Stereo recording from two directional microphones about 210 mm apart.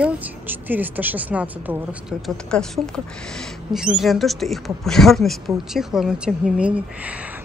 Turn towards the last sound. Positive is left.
turn(degrees=-5)  # may be behind; listen again after turning